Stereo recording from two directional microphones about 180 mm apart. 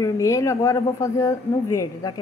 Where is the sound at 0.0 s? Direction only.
15° left (ahead or behind).